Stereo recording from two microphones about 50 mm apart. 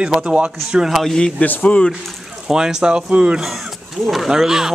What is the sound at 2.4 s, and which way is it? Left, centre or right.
Speech, centre.